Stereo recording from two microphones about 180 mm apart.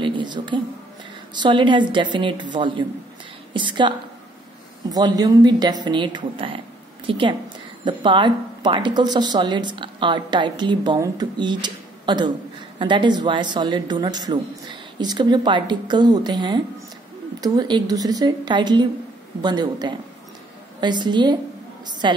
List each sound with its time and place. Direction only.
0.0 s speech: 25° right (ahead or behind)